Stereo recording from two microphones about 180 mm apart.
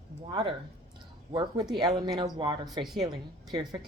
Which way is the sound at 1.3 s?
25° right (ahead or behind).